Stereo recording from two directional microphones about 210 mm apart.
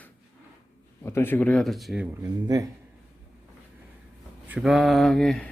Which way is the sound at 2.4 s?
15° right (ahead or behind).